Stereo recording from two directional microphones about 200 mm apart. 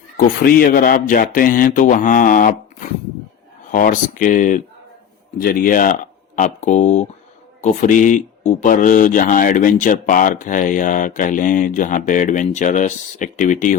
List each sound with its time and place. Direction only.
0.2 s speech: 45° left (ahead or behind)